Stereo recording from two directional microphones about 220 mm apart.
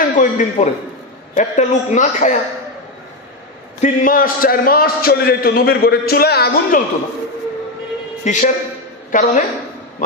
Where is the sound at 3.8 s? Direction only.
40° left (ahead or behind).